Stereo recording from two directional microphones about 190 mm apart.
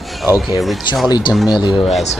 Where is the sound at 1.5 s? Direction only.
25° left (ahead or behind).